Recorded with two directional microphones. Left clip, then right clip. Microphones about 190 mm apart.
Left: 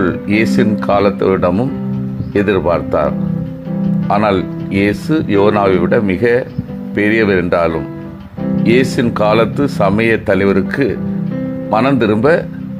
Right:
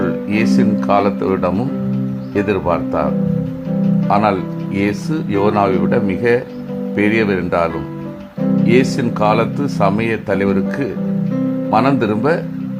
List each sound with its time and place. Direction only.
0.0 s speech: 15° left (ahead or behind)
4.1 s speech: 15° left (ahead or behind)